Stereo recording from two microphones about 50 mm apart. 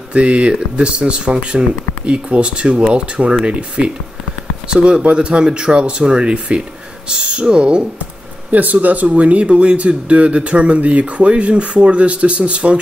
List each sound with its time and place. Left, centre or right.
0.1 s speech: right
8.5 s speech: right